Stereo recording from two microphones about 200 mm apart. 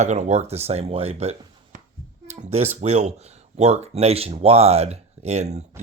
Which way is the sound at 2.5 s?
35° right (ahead or behind).